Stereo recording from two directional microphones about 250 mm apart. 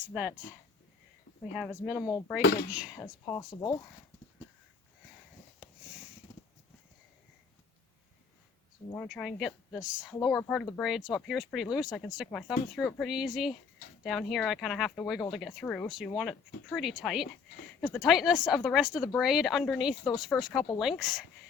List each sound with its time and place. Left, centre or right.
0.1 s speech: centre
1.5 s speech: centre
2.0 s speech: centre
2.4 s speech: left
2.6 s speech: centre
3.0 s speech: centre
9.0 s speech: centre